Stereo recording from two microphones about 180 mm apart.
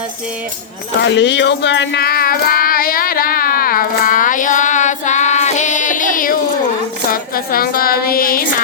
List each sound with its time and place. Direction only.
1.0 s child singing: 80° left; by 6.3 s 50° left (ahead or behind)
7.1 s a woman's voice: 55° left (ahead or behind)